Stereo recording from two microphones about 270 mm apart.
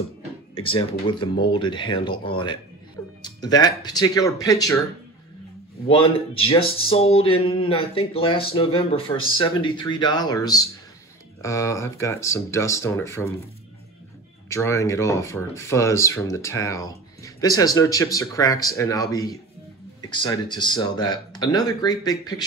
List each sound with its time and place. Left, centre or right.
0.6 s speech: centre
5.9 s speech: centre
14.5 s speech: centre